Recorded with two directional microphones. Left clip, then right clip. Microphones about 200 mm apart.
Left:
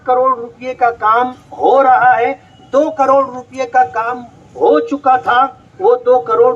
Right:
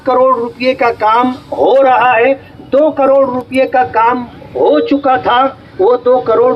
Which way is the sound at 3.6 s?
45° right (ahead or behind).